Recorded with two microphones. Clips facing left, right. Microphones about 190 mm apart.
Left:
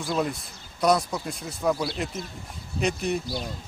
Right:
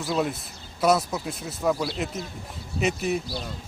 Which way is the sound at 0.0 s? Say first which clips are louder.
Right 1 dB; centre (ahead or behind).